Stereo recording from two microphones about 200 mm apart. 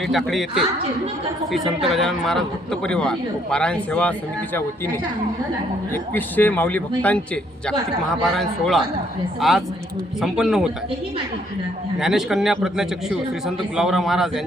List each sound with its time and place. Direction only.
0.1 s speech: centre (ahead or behind)
5.9 s a man's voice: 10° left (ahead or behind)
8.2 s speech: centre (ahead or behind)
11.9 s speech: centre (ahead or behind)